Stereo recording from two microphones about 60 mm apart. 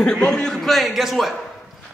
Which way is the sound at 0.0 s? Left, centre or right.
Centre.